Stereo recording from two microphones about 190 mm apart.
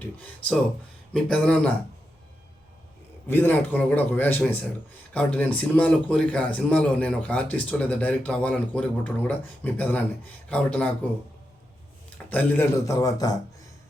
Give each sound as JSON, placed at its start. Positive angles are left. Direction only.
{"t": 0.0, "sound": "a man's voice", "side_deg": 10}
{"t": 3.2, "sound": "a man's voice", "side_deg": 10}
{"t": 12.1, "sound": "a man's voice", "side_deg": 10}